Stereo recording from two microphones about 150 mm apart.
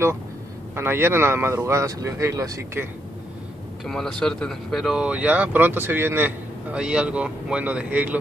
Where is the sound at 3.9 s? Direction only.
5° left (ahead or behind).